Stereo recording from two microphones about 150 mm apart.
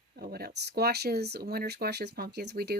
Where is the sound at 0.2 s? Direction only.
90° right.